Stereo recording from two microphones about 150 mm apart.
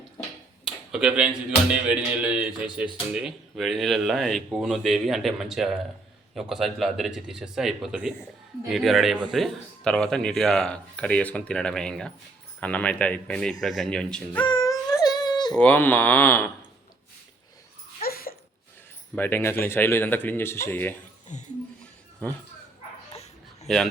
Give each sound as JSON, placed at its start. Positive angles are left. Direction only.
{"t": 0.9, "sound": "speech", "side_deg": -5}
{"t": 14.4, "sound": "a sound", "side_deg": 25}
{"t": 15.5, "sound": "speech", "side_deg": 10}
{"t": 18.0, "sound": "a sound", "side_deg": 80}
{"t": 19.1, "sound": "speech", "side_deg": 15}
{"t": 21.2, "sound": "speech", "side_deg": 50}
{"t": 23.7, "sound": "speech", "side_deg": 5}